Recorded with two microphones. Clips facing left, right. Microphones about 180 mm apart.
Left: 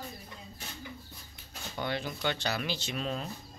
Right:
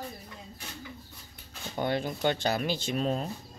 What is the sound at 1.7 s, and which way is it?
Speech, 45° right (ahead or behind).